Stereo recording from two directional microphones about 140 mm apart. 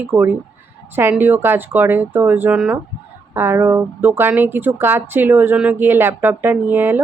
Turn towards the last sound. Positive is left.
turn(degrees=-15)  # may be behind; listen again after turning